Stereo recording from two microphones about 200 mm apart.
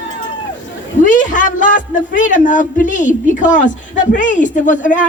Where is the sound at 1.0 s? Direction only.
40° left (ahead or behind).